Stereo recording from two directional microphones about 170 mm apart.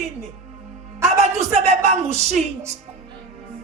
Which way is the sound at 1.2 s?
40° right (ahead or behind).